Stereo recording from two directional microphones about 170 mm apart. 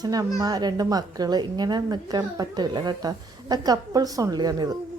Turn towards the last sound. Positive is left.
turn(degrees=-25)  # may be behind; listen again after turning